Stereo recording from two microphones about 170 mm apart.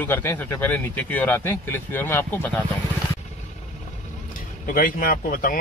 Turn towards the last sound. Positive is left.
turn(degrees=55)  # may be behind; listen again after turning